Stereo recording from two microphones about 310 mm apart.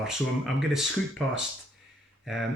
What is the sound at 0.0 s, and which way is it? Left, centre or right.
Speech, centre.